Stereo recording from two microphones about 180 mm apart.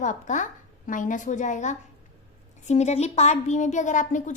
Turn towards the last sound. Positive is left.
turn(degrees=45)  # may be behind; listen again after turning